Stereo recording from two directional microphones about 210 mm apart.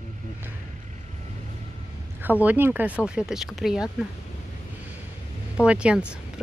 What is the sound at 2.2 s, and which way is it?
Speech, 10° right (ahead or behind).